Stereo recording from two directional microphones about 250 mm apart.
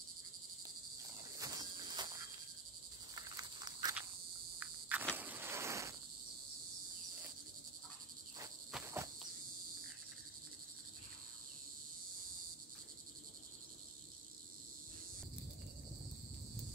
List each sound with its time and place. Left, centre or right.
1.4 s cricket: centre
3.2 s cricket: centre
4.6 s insect: centre
5.1 s cricket: centre
8.7 s insect: centre